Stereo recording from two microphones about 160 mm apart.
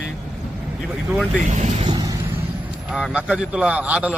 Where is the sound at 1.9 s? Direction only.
25° right (ahead or behind).